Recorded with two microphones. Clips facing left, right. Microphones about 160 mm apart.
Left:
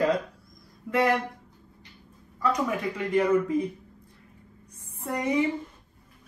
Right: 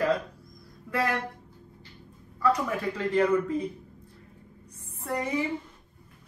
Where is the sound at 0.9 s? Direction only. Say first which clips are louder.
Left 5 dB; 15° left (ahead or behind).